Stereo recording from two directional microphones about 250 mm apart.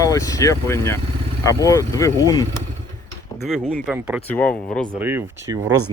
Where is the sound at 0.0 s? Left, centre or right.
Centre.